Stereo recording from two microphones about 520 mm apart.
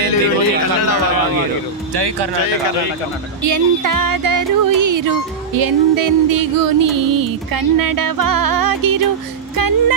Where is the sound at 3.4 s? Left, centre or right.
Right.